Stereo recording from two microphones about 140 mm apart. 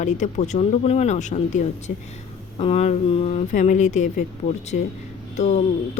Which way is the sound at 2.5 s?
45° left (ahead or behind).